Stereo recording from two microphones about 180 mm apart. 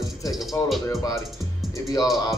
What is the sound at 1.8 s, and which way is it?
Music, 15° left (ahead or behind).